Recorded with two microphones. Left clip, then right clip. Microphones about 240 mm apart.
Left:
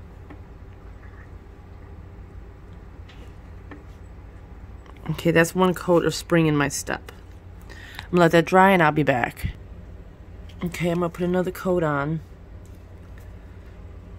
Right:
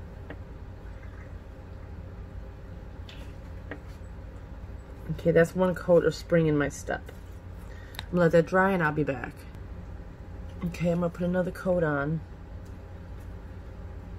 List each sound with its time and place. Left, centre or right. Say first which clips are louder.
5.1 s speech: left 3 dB; left
8.1 s speech: left 5 dB; left
10.7 s speech: left 4 dB; left